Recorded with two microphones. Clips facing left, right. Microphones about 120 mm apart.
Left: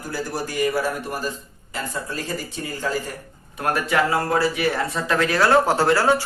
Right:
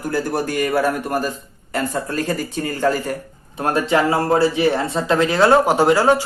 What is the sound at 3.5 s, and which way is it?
Speech, 25° right (ahead or behind).